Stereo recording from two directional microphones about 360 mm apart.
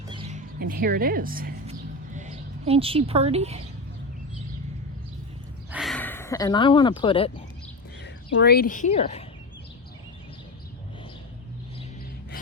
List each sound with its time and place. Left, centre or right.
0.1 s music: centre
2.1 s speech: centre
5.7 s speech: centre
8.0 s speech: left